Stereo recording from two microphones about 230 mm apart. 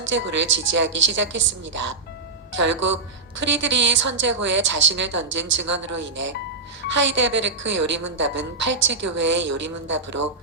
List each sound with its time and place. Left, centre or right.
0.0 s a woman's voice: right